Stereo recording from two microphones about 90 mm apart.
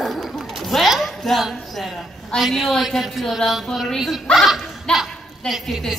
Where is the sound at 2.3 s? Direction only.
Centre (ahead or behind).